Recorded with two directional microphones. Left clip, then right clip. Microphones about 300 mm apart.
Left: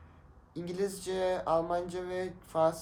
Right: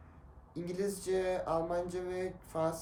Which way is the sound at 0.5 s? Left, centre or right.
Centre.